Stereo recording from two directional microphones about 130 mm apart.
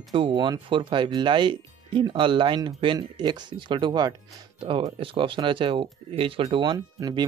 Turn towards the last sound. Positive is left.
turn(degrees=-30)  # may be behind; listen again after turning